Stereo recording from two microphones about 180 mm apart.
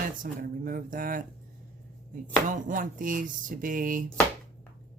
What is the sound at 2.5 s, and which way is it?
Speech, 45° right (ahead or behind).